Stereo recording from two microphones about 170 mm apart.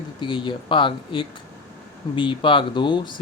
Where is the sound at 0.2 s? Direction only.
30° left (ahead or behind).